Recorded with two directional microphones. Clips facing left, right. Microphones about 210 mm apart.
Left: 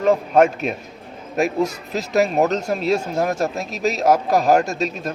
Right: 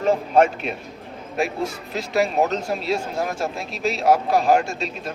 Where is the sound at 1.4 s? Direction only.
45° left (ahead or behind).